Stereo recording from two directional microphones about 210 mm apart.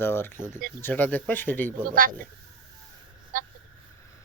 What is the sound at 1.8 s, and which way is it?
Speech, 40° right (ahead or behind).